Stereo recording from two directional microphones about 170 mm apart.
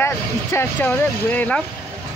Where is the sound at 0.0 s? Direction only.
15° left (ahead or behind).